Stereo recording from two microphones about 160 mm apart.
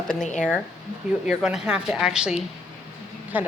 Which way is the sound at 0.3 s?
5° left (ahead or behind).